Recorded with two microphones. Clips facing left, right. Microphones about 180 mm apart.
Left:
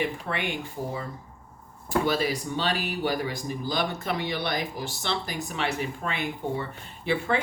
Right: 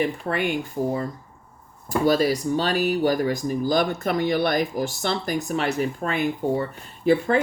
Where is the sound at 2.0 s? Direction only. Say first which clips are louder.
Right 7 dB; 40° right (ahead or behind).